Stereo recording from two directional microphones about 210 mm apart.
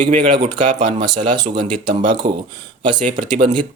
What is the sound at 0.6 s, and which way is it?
Speech, 35° right (ahead or behind).